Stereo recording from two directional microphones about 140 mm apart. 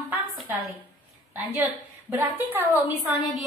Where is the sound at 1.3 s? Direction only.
15° right (ahead or behind).